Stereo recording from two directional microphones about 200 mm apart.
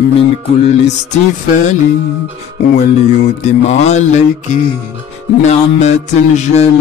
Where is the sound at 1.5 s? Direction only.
35° left (ahead or behind).